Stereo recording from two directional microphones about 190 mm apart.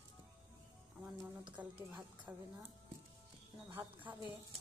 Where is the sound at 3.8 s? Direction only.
10° right (ahead or behind).